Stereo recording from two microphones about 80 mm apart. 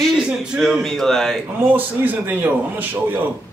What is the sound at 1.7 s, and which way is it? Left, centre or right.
Speech, right.